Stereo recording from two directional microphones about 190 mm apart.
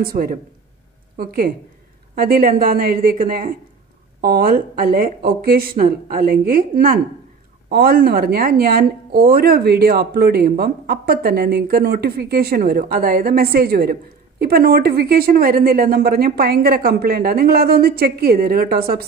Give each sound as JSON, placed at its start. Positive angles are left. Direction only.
{"t": 0.0, "sound": "a woman's voice", "side_deg": -50}